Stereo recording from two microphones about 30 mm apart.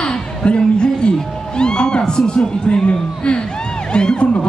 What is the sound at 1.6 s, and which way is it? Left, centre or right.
Speech, left.